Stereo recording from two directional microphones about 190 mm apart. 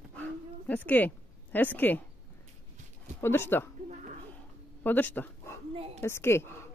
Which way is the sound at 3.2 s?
10° left (ahead or behind).